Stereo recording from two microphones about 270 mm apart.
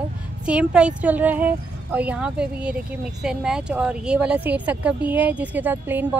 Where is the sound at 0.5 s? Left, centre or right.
Centre.